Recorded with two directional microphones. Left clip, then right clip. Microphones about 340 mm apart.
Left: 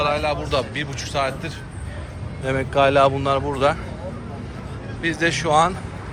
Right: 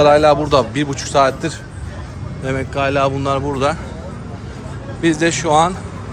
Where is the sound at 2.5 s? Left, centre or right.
Centre.